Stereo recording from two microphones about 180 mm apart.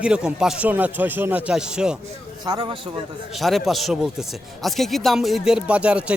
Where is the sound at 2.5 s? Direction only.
25° right (ahead or behind).